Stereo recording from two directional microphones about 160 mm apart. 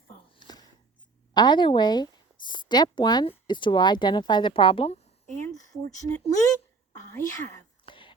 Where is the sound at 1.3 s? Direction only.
25° left (ahead or behind).